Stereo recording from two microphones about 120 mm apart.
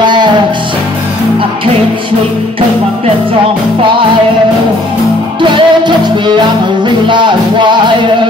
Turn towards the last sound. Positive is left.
turn(degrees=-40)  # may be behind; listen again after turning